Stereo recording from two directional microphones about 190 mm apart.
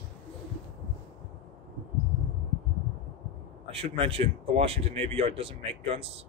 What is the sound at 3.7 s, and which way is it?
Speech, 30° right (ahead or behind).